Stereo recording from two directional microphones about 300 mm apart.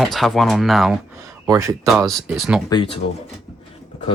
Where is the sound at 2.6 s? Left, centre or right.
Centre.